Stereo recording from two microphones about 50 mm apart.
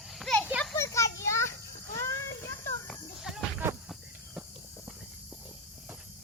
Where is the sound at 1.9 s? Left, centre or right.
Left.